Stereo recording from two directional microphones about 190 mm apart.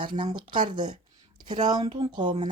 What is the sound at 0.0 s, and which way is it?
Speech, 25° right (ahead or behind).